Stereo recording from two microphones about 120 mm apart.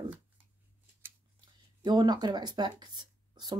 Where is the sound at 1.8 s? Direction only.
35° right (ahead or behind).